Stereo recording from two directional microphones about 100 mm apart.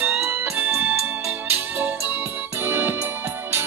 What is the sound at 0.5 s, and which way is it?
Keyboard, 15° right (ahead or behind).